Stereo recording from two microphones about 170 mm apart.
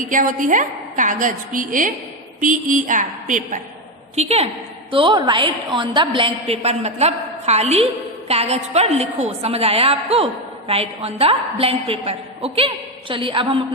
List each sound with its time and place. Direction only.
0.0 s a woman's voice: 50° right (ahead or behind)
4.1 s a woman's voice: 40° right (ahead or behind)
4.9 s a woman's voice: 30° right (ahead or behind)